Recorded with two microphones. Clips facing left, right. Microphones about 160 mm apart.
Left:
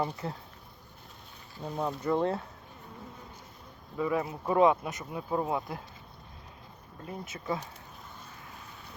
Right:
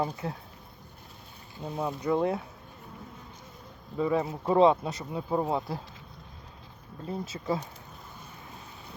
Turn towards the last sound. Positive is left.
turn(degrees=-30)  # may be behind; listen again after turning